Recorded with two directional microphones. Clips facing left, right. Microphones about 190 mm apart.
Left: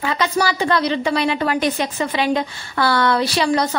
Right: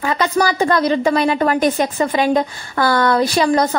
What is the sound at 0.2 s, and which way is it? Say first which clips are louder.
A woman's voice: right 3 dB; 45° right (ahead or behind).